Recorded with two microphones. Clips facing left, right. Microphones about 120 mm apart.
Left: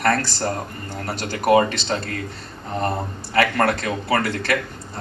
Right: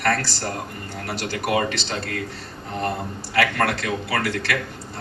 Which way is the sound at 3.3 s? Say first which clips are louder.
Left 3 dB; 40° left (ahead or behind).